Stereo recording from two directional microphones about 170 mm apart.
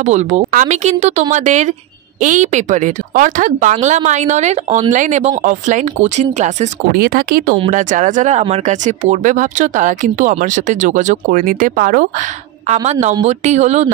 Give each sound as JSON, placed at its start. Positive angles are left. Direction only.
{"t": 0.0, "sound": "a woman's voice", "side_deg": -40}
{"t": 6.9, "sound": "a woman's voice", "side_deg": -60}
{"t": 12.6, "sound": "speech", "side_deg": -40}